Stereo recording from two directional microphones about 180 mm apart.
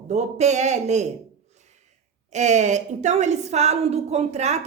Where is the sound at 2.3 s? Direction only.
40° right (ahead or behind).